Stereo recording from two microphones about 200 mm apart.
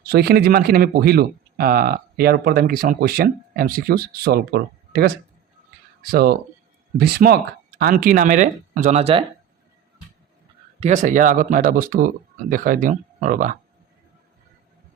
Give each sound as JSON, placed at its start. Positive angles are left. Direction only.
{"t": 0.0, "sound": "speech", "side_deg": -50}
{"t": 10.8, "sound": "speech", "side_deg": -35}